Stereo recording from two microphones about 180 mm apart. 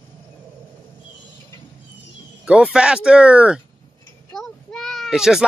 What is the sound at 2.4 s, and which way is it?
A child's voice, 5° right (ahead or behind).